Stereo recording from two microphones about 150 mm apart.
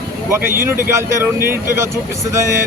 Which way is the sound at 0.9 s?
15° right (ahead or behind).